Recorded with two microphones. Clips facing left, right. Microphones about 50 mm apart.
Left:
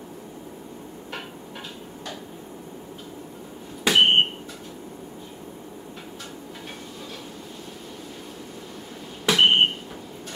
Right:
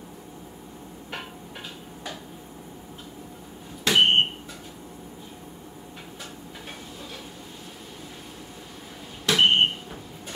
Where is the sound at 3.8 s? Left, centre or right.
Centre.